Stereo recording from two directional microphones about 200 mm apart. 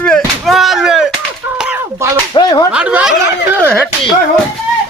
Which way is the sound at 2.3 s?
20° left (ahead or behind).